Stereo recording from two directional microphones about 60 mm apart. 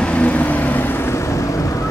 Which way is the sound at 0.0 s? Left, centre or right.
Left.